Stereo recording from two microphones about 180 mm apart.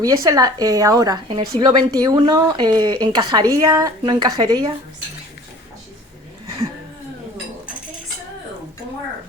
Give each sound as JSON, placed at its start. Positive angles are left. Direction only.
{"t": 0.0, "sound": "a woman's voice", "side_deg": -20}